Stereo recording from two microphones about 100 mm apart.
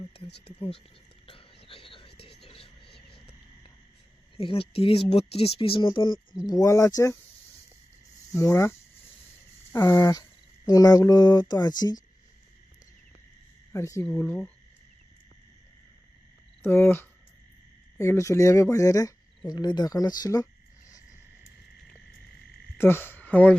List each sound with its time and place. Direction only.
0.1 s speech: 70° left (ahead or behind)
1.3 s whispering: 65° left (ahead or behind)
2.5 s a sound: 70° left (ahead or behind)
4.4 s speech: 70° left (ahead or behind); by 6.1 s 55° left (ahead or behind)
6.3 s speech: 40° left (ahead or behind)
8.3 s speech: 30° left (ahead or behind)
9.7 s speech: 35° left (ahead or behind)
13.7 s speech: 30° left (ahead or behind)
14.0 s speech: 15° left (ahead or behind)
16.6 s speech: 25° left (ahead or behind)
22.8 s speech: 25° left (ahead or behind)